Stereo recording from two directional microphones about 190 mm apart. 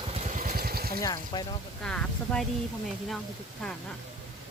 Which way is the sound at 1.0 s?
20° left (ahead or behind).